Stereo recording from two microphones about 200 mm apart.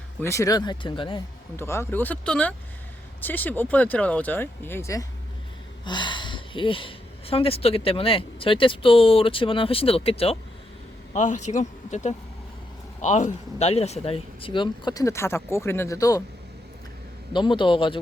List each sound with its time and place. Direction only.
0.2 s speech: 15° left (ahead or behind)
1.5 s speech: 15° left (ahead or behind)
17.3 s speech: 25° left (ahead or behind)